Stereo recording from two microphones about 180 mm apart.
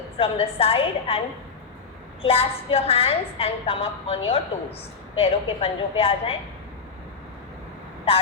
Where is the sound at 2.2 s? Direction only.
35° left (ahead or behind).